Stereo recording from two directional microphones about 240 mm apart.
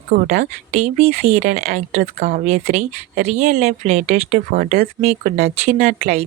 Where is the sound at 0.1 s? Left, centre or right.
Right.